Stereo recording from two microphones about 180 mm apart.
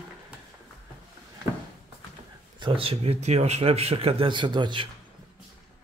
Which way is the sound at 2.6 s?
30° right (ahead or behind).